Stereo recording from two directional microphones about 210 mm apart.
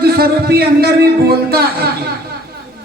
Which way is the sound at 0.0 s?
50° right (ahead or behind).